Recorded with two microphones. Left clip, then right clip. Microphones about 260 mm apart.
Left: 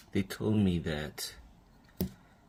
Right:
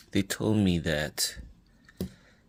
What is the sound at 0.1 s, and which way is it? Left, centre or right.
Speech, right.